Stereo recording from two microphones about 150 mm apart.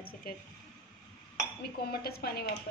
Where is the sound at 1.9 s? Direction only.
90° left.